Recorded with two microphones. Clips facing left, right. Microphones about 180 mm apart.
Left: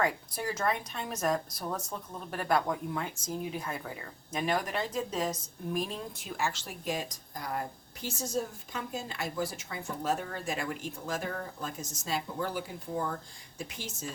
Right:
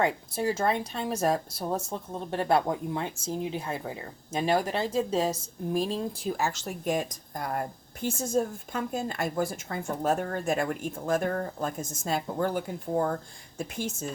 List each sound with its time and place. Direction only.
0.0 s a woman's voice: 25° right (ahead or behind); by 14.1 s 50° right (ahead or behind)